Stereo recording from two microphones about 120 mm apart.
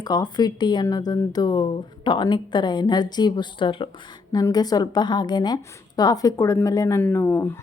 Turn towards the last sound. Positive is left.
turn(degrees=20)  # may be behind; listen again after turning